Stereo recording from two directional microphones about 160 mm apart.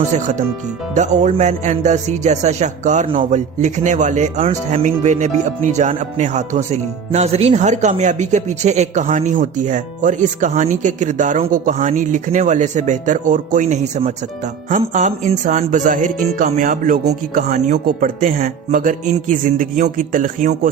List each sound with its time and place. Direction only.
0.9 s speech: 50° right (ahead or behind)